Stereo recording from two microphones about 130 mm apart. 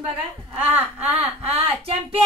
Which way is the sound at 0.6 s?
15° right (ahead or behind).